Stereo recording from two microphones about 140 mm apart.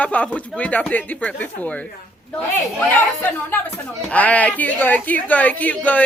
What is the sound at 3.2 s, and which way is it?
Speech, 15° left (ahead or behind).